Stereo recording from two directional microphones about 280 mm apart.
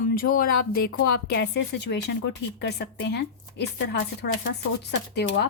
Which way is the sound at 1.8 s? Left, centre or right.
Left.